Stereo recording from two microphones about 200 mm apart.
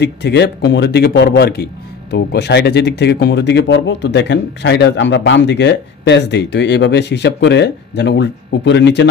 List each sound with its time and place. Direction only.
0.0 s a man's voice: 55° left (ahead or behind)